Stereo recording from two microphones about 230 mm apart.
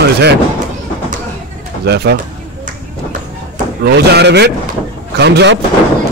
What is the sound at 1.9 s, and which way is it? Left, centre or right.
Speech, right.